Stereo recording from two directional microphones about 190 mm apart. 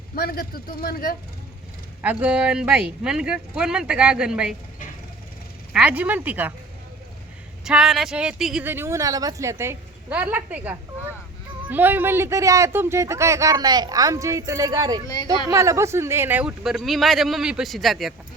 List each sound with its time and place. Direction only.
0.2 s speech: 50° left (ahead or behind)
2.0 s speech: 10° right (ahead or behind)
5.7 s speech: 5° right (ahead or behind)
7.6 s speech: 5° right (ahead or behind)